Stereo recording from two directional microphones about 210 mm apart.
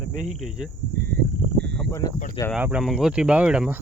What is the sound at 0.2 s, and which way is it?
Speech, centre (ahead or behind).